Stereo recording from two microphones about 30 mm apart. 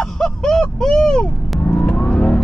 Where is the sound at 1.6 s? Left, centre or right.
Left.